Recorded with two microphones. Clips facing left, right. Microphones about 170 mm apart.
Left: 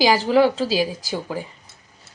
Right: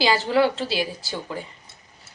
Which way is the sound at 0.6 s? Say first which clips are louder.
Left 5 dB; 40° left (ahead or behind).